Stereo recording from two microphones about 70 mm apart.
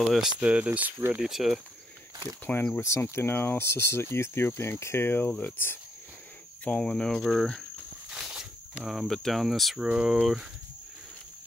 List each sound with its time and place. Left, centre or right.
0.0 s speech: centre
0.4 s speech: centre
1.2 s speech: centre
2.8 s speech: left
6.6 s speech: centre
6.9 s speech: centre
8.1 s speech: centre